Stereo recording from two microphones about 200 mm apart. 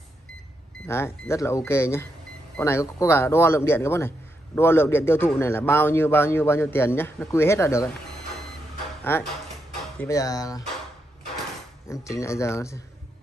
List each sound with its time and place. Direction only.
0.8 s a man's voice: 15° left (ahead or behind)
9.1 s a man's voice: 10° left (ahead or behind)
11.9 s a man's voice: 15° left (ahead or behind)